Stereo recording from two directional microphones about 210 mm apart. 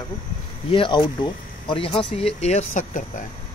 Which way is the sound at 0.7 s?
25° left (ahead or behind).